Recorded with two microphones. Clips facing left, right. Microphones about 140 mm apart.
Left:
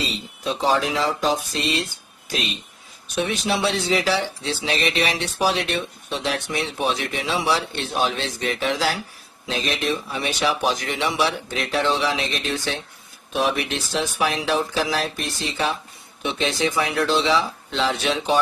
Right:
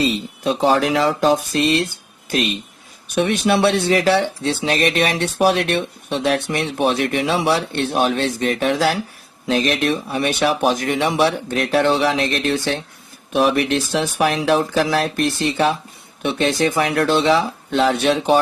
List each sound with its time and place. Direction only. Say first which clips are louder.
0.0 s speech: right 8 dB; 60° right (ahead or behind)
3.2 s speech: right 6 dB; 55° right (ahead or behind)